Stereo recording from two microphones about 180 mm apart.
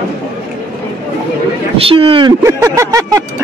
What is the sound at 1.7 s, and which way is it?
Speech, 30° right (ahead or behind).